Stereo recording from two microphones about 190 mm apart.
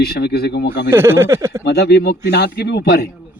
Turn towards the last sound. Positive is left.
turn(degrees=60)  # may be behind; listen again after turning